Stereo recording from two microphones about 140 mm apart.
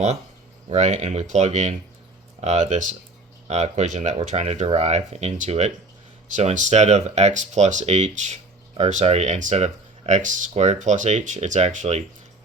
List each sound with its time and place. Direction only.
0.7 s speech: 60° right (ahead or behind)